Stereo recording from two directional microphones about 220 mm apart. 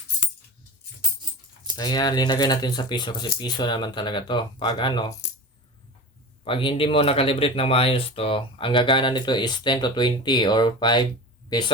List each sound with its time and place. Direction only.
1.7 s speech: 20° left (ahead or behind)
6.4 s speech: 25° left (ahead or behind)